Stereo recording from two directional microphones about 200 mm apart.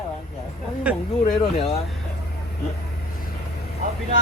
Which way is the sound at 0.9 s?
5° right (ahead or behind).